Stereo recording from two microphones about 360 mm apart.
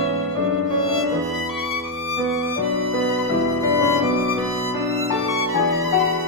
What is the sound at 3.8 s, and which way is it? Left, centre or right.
Music, centre.